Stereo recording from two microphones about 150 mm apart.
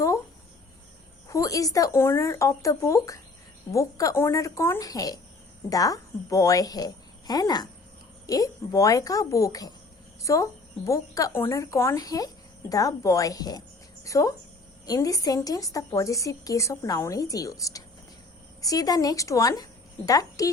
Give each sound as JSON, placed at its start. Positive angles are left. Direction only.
{"t": 1.3, "sound": "speech", "side_deg": 20}